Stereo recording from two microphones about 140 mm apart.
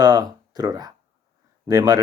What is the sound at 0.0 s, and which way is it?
Speech, 30° right (ahead or behind).